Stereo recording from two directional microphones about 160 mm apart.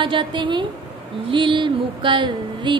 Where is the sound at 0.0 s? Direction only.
30° right (ahead or behind).